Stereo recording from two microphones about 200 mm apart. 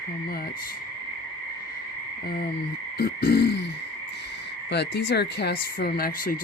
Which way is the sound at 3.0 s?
50° left (ahead or behind).